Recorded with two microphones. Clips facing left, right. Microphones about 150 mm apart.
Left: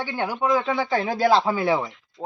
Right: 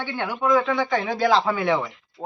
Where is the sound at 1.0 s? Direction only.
35° left (ahead or behind).